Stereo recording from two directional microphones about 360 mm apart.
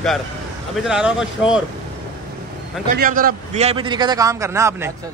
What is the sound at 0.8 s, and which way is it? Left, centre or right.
Speech, centre.